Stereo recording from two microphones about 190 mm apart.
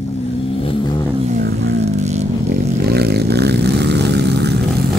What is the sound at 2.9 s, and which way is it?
Vehicle, 55° right (ahead or behind).